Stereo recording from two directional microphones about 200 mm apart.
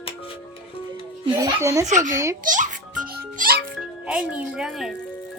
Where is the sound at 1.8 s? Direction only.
35° right (ahead or behind).